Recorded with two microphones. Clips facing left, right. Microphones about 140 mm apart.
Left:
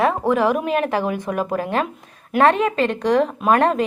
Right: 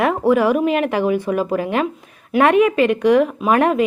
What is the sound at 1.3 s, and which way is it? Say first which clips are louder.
Speech: right 4 dB; centre (ahead or behind).